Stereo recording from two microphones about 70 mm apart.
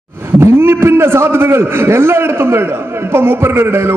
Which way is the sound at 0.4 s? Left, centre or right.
Right.